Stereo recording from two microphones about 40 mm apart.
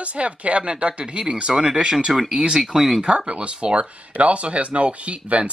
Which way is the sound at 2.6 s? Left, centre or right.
Centre.